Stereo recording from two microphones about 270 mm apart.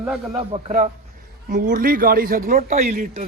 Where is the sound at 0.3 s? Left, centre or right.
Right.